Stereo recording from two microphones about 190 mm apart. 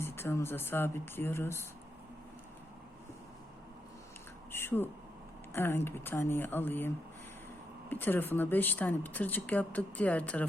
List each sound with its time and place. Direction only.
0.0 s speech: 10° left (ahead or behind)
4.5 s a sound: 10° left (ahead or behind)
5.5 s speech: 10° left (ahead or behind)